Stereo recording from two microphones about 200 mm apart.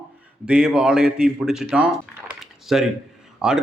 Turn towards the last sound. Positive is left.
turn(degrees=-5)  # may be behind; listen again after turning